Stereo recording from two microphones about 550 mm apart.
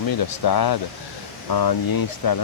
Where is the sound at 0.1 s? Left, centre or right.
Left.